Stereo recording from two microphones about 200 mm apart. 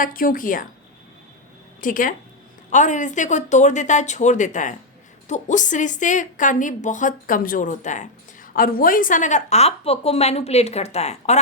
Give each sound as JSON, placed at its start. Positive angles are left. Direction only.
{"t": 0.0, "sound": "a woman's voice", "side_deg": 45}
{"t": 1.8, "sound": "a woman's voice", "side_deg": 40}